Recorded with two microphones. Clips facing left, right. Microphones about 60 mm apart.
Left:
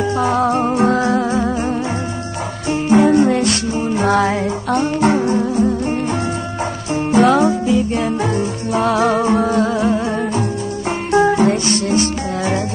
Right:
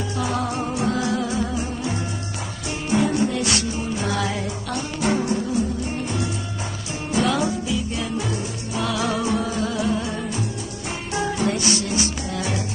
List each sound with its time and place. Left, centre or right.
0.2 s music: left
7.1 s music: left